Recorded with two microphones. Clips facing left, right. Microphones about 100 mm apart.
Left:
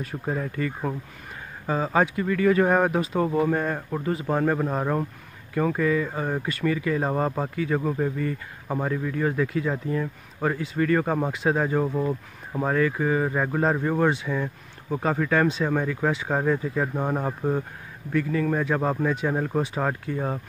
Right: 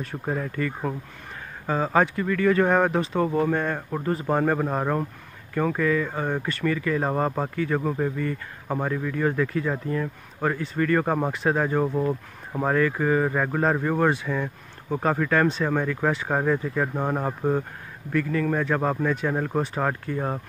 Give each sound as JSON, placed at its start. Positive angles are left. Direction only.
{"t": 0.1, "sound": "speech", "side_deg": -10}
{"t": 1.7, "sound": "speech", "side_deg": 0}
{"t": 2.1, "sound": "speech", "side_deg": 15}
{"t": 7.0, "sound": "speech", "side_deg": -5}
{"t": 7.5, "sound": "speech", "side_deg": 5}
{"t": 8.6, "sound": "speech", "side_deg": -10}
{"t": 8.9, "sound": "speech", "side_deg": 5}
{"t": 11.1, "sound": "speech", "side_deg": -10}
{"t": 11.3, "sound": "speech", "side_deg": 0}
{"t": 12.7, "sound": "speech", "side_deg": 5}
{"t": 16.9, "sound": "speech", "side_deg": -5}
{"t": 18.1, "sound": "speech", "side_deg": 5}